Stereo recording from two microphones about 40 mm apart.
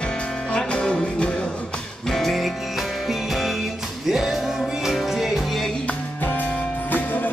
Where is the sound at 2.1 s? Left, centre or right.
Centre.